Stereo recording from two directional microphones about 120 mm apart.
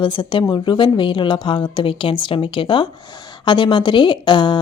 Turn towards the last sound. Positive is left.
turn(degrees=40)  # may be behind; listen again after turning